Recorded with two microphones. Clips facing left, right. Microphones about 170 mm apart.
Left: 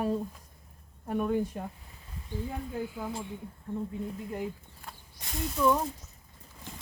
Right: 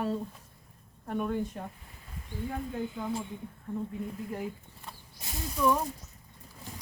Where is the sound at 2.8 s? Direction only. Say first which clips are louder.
Right 1 dB; 5° left (ahead or behind).